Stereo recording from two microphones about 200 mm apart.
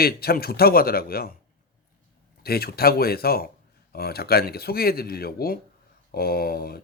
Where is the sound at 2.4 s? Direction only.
50° left (ahead or behind).